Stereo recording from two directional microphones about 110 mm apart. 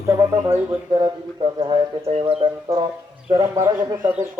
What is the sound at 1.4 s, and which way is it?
Speech, 55° right (ahead or behind).